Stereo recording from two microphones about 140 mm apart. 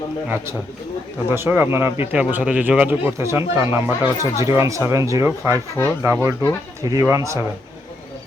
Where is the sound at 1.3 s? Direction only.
15° right (ahead or behind).